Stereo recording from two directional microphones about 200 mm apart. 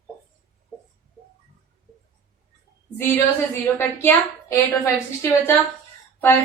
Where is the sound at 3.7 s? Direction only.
10° left (ahead or behind).